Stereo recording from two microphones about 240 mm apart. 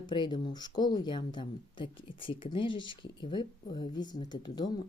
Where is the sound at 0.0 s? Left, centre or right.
Centre.